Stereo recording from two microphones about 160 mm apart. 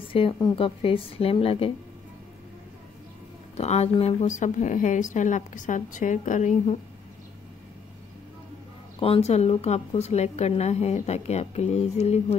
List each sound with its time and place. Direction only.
0.1 s a woman's voice: 35° left (ahead or behind)
3.5 s a woman's voice: 40° left (ahead or behind)
9.0 s a woman's voice: 40° left (ahead or behind)